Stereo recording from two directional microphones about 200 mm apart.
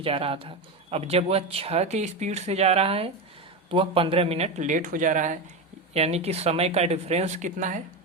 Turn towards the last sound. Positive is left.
turn(degrees=-40)  # may be behind; listen again after turning